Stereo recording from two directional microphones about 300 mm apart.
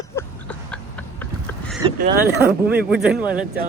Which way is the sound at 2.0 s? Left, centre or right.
Right.